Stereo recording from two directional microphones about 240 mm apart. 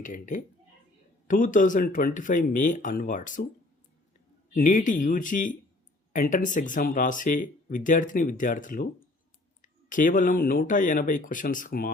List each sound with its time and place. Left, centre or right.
0.0 s speech: left
4.5 s speech: left